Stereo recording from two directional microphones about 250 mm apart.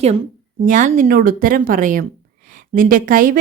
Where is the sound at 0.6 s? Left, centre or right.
Right.